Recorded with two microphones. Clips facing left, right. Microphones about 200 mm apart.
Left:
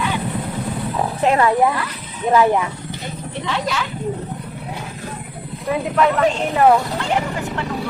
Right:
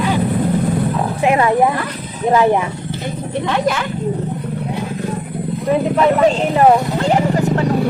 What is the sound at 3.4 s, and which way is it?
Speech, 55° right (ahead or behind).